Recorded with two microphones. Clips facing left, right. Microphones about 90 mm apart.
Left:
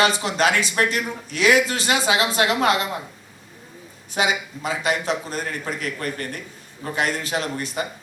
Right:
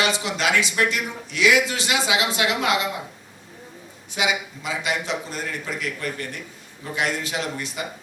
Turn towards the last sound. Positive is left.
turn(degrees=40)  # may be behind; listen again after turning